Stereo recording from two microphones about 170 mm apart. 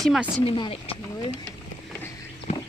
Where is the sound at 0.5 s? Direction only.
35° left (ahead or behind).